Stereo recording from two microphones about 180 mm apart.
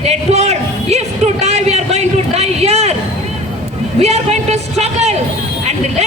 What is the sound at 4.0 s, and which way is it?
A man's voice, 35° right (ahead or behind).